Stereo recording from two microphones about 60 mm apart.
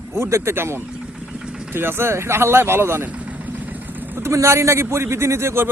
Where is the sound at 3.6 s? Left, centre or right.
Right.